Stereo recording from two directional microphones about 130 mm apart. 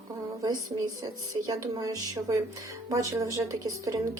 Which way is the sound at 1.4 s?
25° right (ahead or behind).